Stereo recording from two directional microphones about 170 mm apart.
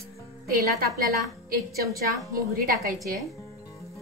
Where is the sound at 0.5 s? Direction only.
60° right (ahead or behind).